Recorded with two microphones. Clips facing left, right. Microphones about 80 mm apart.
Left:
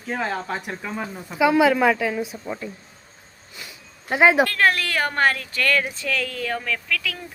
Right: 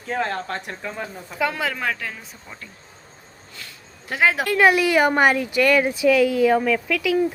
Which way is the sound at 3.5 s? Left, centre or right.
Centre.